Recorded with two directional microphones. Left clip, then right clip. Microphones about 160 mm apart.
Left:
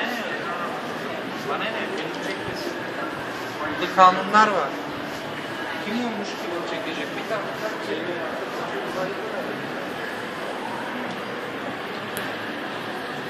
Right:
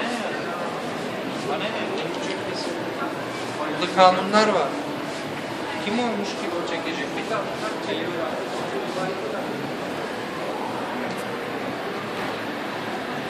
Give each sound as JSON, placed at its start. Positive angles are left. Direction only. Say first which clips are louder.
{"t": 4.0, "sound": "a man's voice", "louder": "left 1 dB", "side_deg": -55}